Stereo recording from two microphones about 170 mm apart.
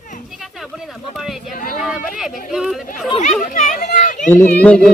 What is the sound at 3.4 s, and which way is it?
Speech, 50° left (ahead or behind).